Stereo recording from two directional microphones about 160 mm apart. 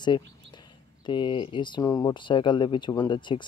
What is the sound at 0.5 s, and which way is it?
Speech, 30° left (ahead or behind).